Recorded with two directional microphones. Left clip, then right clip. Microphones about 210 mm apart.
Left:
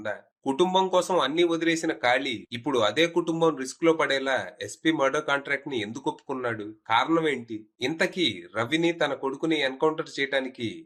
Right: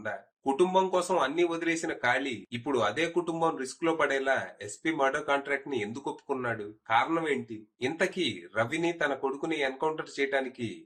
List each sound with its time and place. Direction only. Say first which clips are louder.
0.0 s speech: left 2 dB; 45° left (ahead or behind)